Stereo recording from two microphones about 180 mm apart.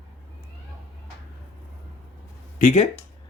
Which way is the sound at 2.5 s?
40° left (ahead or behind).